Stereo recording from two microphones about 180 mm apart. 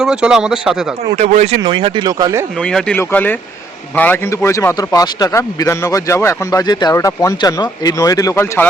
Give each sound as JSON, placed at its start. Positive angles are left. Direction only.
{"t": 0.0, "sound": "speech", "side_deg": -5}
{"t": 1.1, "sound": "speech", "side_deg": -40}
{"t": 2.6, "sound": "a man's voice", "side_deg": 5}